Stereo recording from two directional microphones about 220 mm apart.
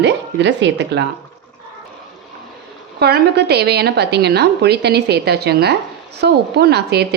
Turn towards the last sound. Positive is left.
turn(degrees=-50)  # may be behind; listen again after turning